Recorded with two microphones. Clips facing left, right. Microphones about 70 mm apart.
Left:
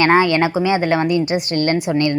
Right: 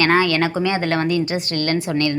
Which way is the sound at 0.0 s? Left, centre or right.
Left.